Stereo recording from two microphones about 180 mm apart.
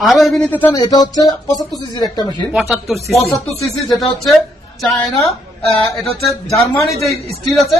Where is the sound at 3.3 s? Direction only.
20° left (ahead or behind).